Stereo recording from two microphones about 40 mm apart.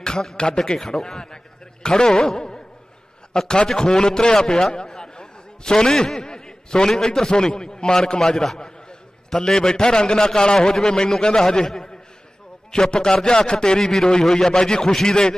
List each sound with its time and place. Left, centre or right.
0.0 s a man's voice: centre
1.0 s a sound: centre
3.3 s a man's voice: centre